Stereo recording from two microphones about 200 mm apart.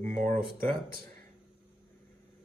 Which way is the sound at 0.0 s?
40° right (ahead or behind).